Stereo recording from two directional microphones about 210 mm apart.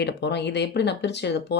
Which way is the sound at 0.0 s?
55° left (ahead or behind).